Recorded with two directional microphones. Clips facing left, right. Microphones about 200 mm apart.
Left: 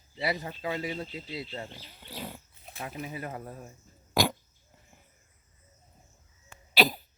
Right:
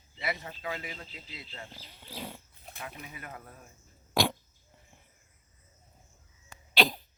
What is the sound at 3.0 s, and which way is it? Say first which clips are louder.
Speech: left 8 dB; 30° left (ahead or behind).